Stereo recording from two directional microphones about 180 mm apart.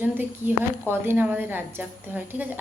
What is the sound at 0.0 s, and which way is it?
A woman's voice, 10° right (ahead or behind).